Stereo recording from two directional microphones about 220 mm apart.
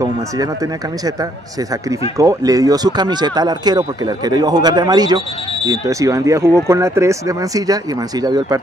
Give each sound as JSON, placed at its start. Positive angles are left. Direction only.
{"t": 0.0, "sound": "speech", "side_deg": -15}